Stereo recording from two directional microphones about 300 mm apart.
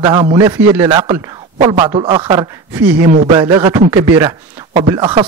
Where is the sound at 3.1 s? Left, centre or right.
Right.